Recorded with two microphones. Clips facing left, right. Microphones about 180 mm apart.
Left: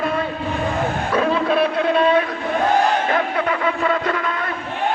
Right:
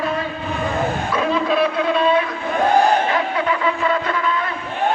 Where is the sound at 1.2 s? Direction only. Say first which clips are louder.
Left 1 dB; 50° left (ahead or behind).